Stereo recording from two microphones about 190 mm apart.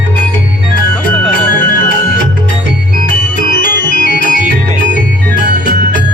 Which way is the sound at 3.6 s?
50° left (ahead or behind).